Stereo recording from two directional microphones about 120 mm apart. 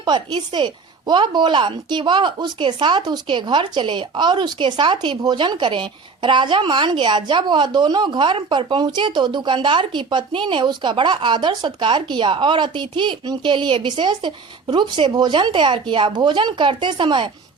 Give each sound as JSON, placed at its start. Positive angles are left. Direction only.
{"t": 0.0, "sound": "speech", "side_deg": -40}